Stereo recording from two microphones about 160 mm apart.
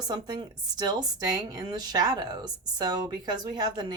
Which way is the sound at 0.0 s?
25° right (ahead or behind).